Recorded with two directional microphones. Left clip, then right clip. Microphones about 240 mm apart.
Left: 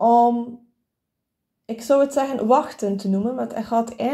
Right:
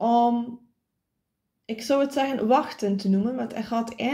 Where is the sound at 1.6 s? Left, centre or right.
Centre.